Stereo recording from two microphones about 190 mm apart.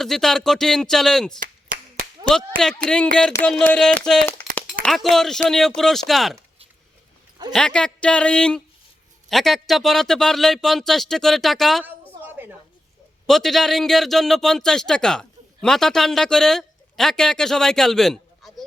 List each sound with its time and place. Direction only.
0.0 s speech: centre (ahead or behind)
1.4 s clapping: 45° right (ahead or behind)
2.6 s speech: 5° left (ahead or behind)
4.5 s a sound: 5° left (ahead or behind)
5.5 s speech: centre (ahead or behind)
7.5 s speech: 5° left (ahead or behind)
12.2 s a sound: 10° right (ahead or behind)
13.2 s a man's voice: centre (ahead or behind)